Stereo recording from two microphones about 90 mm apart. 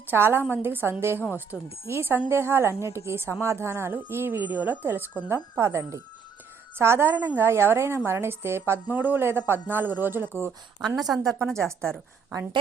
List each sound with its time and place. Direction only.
0.1 s a woman's voice: 25° right (ahead or behind)
1.5 s speech: 10° right (ahead or behind)
1.9 s a woman's voice: 25° right (ahead or behind)
10.8 s a woman's voice: centre (ahead or behind)
11.4 s speech: 10° left (ahead or behind)